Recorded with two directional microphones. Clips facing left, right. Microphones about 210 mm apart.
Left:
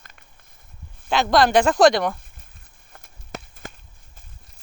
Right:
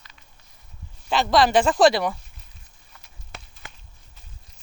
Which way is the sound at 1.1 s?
Centre (ahead or behind).